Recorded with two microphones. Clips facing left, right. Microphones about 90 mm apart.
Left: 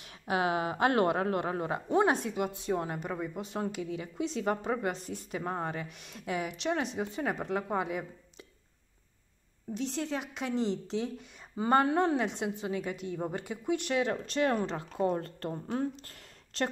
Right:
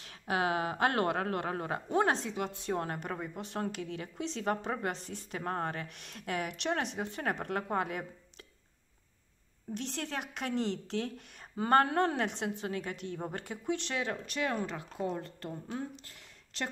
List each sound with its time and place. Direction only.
0.1 s speech: 35° right (ahead or behind)
0.9 s a woman's voice: 25° left (ahead or behind); by 8.0 s 10° left (ahead or behind)
9.8 s a woman's voice: 5° left (ahead or behind)
13.9 s speech: 25° left (ahead or behind); by 16.6 s 40° left (ahead or behind)